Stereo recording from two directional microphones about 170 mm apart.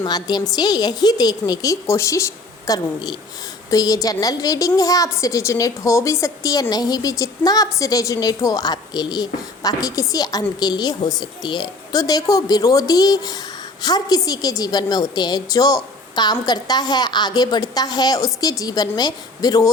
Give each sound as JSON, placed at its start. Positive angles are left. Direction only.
{"t": 0.0, "sound": "a woman's voice", "side_deg": 25}